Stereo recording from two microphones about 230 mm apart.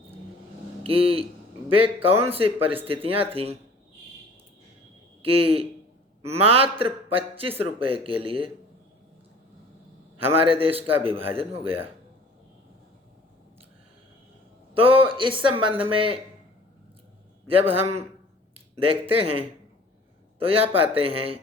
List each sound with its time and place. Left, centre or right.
0.9 s a man's voice: right
5.2 s a man's voice: right
10.2 s a man's voice: right
14.7 s a man's voice: right
17.5 s a man's voice: right